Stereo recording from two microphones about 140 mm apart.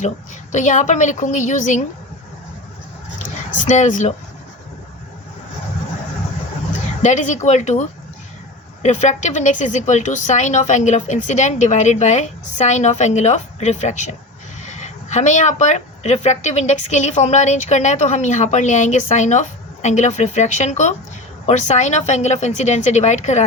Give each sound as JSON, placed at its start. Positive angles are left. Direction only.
{"t": 0.5, "sound": "speech", "side_deg": 60}
{"t": 3.2, "sound": "dog", "side_deg": 65}
{"t": 7.0, "sound": "speech", "side_deg": 60}